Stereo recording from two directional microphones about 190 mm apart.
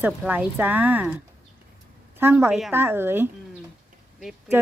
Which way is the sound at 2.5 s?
Centre (ahead or behind).